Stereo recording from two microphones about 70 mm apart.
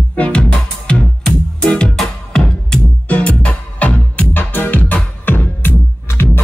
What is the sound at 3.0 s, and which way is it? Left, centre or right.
Music, left.